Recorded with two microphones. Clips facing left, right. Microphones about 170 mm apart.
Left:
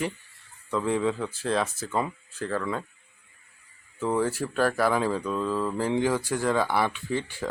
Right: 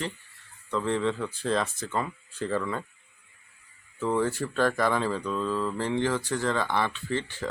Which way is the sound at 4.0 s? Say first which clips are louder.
Left 1 dB; 10° left (ahead or behind).